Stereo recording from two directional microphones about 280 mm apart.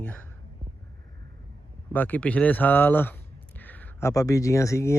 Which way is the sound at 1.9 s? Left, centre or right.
Centre.